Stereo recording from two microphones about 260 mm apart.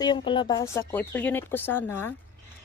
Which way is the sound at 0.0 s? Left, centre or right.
Centre.